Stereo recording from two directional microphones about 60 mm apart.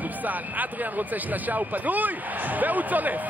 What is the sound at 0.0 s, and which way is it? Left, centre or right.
Speech, right.